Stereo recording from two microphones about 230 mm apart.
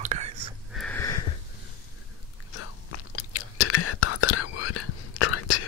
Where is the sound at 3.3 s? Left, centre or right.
Left.